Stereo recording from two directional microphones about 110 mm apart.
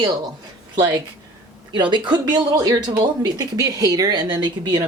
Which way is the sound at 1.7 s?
45° right (ahead or behind).